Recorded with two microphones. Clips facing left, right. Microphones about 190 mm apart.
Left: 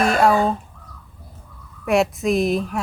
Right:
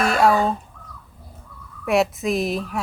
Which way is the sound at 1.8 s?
Centre (ahead or behind).